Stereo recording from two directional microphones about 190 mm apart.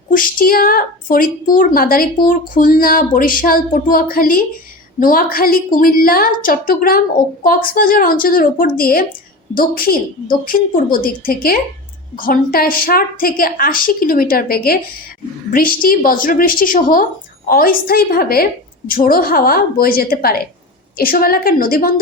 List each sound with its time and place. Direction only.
0.1 s a woman's voice: 45° left (ahead or behind)